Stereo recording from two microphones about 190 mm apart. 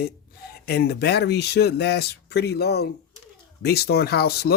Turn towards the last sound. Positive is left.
turn(degrees=55)  # may be behind; listen again after turning